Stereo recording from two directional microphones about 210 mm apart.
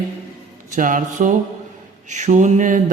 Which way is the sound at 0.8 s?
40° right (ahead or behind).